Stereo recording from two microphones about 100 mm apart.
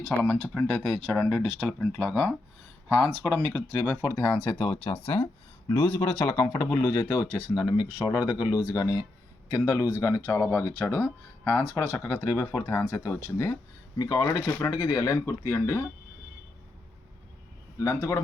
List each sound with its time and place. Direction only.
0.2 s speech: 5° left (ahead or behind)
3.2 s speech: 10° left (ahead or behind)
4.0 s speech: 25° left (ahead or behind)
4.5 s speech: 45° left (ahead or behind); by 11.8 s 20° left (ahead or behind)
11.8 s speech: 30° left (ahead or behind)
14.0 s speech: 40° left (ahead or behind)
17.7 s speech: 30° left (ahead or behind)